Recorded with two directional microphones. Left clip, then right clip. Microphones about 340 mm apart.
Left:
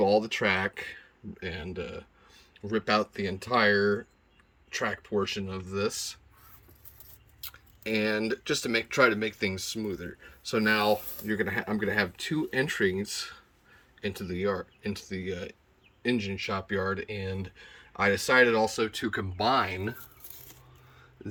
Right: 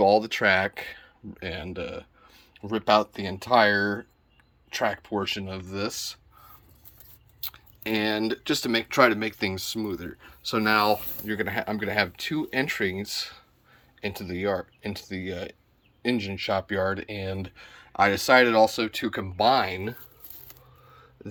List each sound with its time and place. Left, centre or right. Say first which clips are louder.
0.0 s speech: right 4 dB; centre
3.3 s speech: right 4 dB; centre
7.4 s speech: right 3 dB; centre